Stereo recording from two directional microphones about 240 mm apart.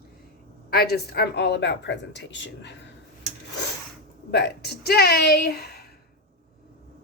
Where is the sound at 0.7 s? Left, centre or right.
Left.